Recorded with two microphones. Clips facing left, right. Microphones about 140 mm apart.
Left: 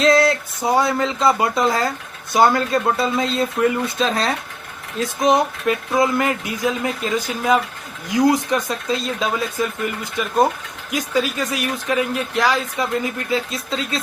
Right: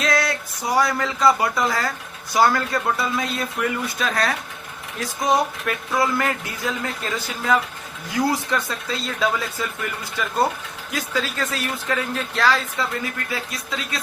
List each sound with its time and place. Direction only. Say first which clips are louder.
0.0 s speech: left 7 dB; 25° left (ahead or behind)